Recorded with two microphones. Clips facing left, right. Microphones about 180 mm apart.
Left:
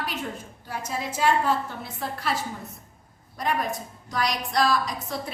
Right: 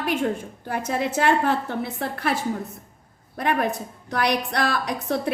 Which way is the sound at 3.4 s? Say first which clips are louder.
Right 4 dB; 65° right (ahead or behind).